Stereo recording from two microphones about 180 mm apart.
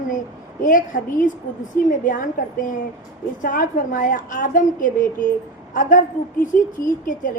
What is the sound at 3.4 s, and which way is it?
A woman's voice, 50° left (ahead or behind).